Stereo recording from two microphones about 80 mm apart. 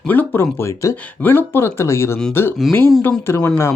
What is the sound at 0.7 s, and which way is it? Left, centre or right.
Speech, left.